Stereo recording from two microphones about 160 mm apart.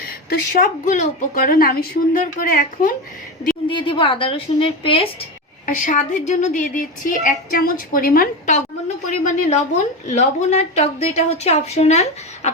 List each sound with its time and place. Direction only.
0.3 s a woman's voice: 55° left (ahead or behind)
3.7 s a woman's voice: 30° left (ahead or behind)
5.6 s a woman's voice: 55° left (ahead or behind)
9.0 s a woman's voice: 50° left (ahead or behind)